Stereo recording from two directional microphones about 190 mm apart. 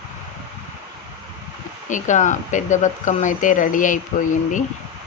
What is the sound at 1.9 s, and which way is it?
Speech, 40° left (ahead or behind).